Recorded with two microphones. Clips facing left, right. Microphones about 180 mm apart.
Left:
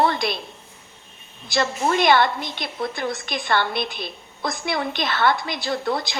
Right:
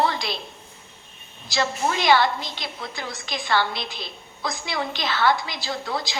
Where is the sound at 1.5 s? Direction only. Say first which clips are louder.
Left 3 dB; 55° left (ahead or behind).